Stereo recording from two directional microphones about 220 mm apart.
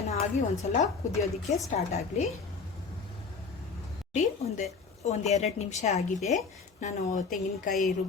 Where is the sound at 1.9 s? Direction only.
30° left (ahead or behind).